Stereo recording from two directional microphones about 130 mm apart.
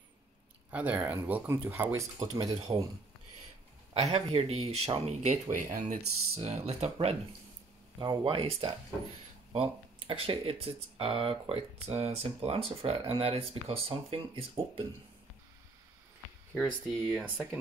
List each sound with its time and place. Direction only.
0.7 s speech: 10° right (ahead or behind)
3.9 s speech: 55° right (ahead or behind); by 5.9 s 85° right
6.3 s speech: 55° right (ahead or behind)
8.0 s speech: 35° right (ahead or behind)
16.5 s speech: centre (ahead or behind)
17.2 s speech: 10° right (ahead or behind)